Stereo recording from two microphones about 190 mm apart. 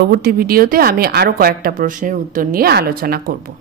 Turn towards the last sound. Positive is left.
turn(degrees=-50)  # may be behind; listen again after turning